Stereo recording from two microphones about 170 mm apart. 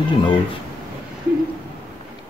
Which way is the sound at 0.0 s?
30° left (ahead or behind).